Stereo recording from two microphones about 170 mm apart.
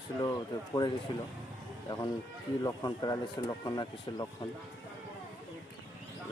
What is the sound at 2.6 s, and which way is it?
Speech, 20° left (ahead or behind).